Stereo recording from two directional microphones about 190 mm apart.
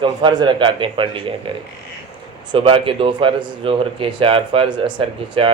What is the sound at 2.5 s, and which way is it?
A man's voice, 30° right (ahead or behind).